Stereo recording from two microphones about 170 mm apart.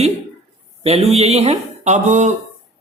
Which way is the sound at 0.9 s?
35° right (ahead or behind).